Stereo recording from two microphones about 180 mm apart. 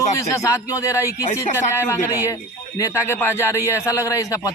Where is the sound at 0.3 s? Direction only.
15° left (ahead or behind).